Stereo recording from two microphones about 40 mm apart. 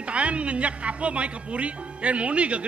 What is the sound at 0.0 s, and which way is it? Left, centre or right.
A man's voice, right.